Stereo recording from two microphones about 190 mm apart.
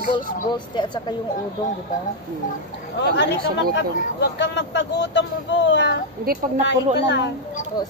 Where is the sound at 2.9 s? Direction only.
70° left (ahead or behind).